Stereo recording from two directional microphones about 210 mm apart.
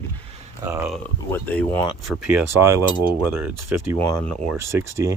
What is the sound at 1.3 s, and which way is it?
Speech, 5° left (ahead or behind).